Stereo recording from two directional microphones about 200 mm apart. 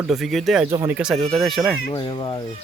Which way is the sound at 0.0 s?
Centre (ahead or behind).